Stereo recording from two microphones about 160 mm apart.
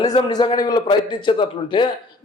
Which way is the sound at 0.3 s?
25° left (ahead or behind).